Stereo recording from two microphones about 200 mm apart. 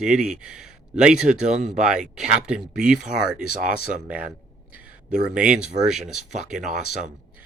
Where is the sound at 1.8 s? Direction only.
5° right (ahead or behind).